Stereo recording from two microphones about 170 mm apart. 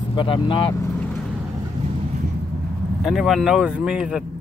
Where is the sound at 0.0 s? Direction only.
30° left (ahead or behind).